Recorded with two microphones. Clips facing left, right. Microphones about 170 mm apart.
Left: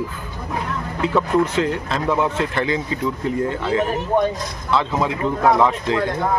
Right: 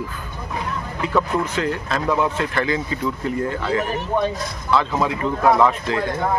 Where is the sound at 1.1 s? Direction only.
20° left (ahead or behind).